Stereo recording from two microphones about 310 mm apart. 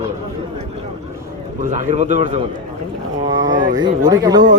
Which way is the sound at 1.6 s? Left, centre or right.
Right.